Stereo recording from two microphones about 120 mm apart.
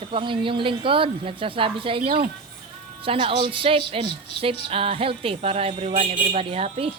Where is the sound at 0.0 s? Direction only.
45° right (ahead or behind).